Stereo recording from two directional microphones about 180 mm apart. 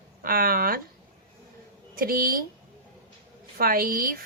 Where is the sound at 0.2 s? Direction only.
55° right (ahead or behind).